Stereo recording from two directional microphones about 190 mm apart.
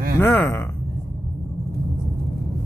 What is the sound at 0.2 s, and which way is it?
Speech, 10° left (ahead or behind).